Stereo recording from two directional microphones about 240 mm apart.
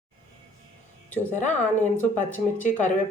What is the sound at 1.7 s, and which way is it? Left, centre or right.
Speech, left.